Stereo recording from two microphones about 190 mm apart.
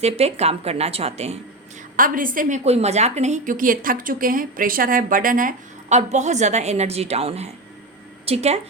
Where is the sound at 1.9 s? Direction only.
45° right (ahead or behind).